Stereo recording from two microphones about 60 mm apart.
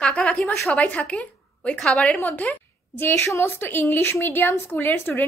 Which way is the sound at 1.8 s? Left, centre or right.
Centre.